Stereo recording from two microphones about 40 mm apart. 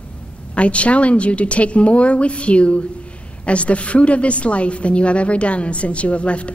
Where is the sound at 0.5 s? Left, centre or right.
Left.